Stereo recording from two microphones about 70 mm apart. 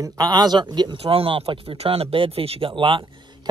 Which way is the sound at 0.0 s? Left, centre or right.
Right.